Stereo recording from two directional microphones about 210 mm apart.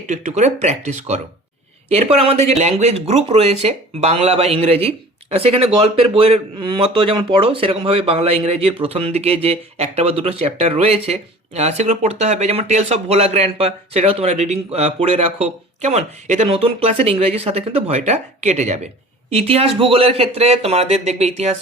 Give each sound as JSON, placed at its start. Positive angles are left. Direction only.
{"t": 0.1, "sound": "speech", "side_deg": -35}